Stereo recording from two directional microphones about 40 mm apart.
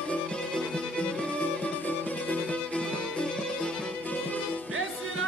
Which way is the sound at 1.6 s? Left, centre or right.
Left.